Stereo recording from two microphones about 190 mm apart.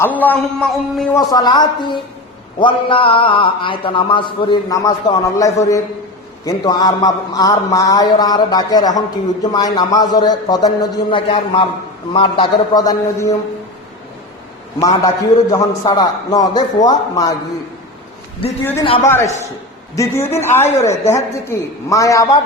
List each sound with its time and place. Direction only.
0.0 s a man's voice: 10° left (ahead or behind)
1.3 s a man's voice: 20° left (ahead or behind)
14.8 s a man's voice: 20° left (ahead or behind)
18.6 s a man's voice: 10° left (ahead or behind)